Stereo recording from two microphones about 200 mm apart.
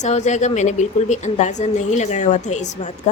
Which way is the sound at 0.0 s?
35° left (ahead or behind).